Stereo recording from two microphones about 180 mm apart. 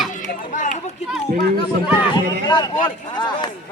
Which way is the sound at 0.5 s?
45° left (ahead or behind).